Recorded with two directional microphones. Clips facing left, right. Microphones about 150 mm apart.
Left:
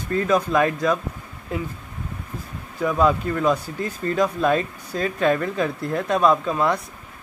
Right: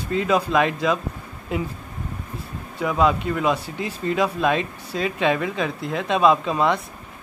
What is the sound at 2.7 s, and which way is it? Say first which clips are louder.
Speech: left 1 dB; 5° right (ahead or behind).